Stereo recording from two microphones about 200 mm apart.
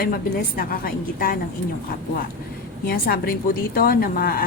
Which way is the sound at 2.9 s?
45° left (ahead or behind).